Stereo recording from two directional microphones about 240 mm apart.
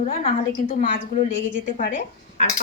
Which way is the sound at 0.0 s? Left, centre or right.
Left.